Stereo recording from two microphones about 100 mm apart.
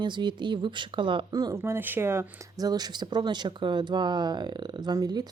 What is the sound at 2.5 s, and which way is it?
Speech, 40° right (ahead or behind).